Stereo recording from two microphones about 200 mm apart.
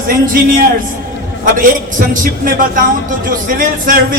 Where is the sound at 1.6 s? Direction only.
45° right (ahead or behind).